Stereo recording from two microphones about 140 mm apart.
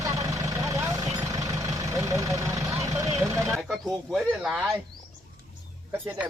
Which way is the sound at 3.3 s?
20° right (ahead or behind).